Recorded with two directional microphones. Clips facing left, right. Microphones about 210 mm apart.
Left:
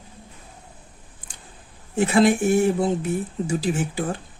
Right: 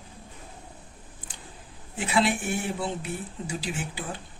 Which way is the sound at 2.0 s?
45° left (ahead or behind).